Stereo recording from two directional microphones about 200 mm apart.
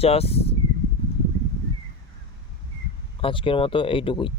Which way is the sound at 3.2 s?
25° left (ahead or behind).